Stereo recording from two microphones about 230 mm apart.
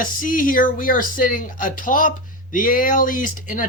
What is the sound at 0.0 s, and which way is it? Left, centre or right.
Speech, left.